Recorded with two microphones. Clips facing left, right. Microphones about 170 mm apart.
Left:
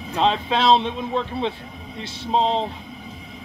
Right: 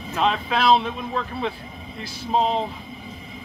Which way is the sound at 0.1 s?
30° left (ahead or behind).